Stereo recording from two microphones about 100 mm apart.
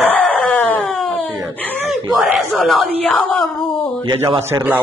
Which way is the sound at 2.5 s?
Centre (ahead or behind).